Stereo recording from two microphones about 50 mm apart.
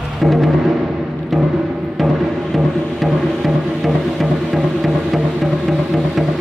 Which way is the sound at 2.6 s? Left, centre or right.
Centre.